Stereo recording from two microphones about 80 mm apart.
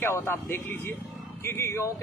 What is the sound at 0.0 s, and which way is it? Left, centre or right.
A man's voice, left.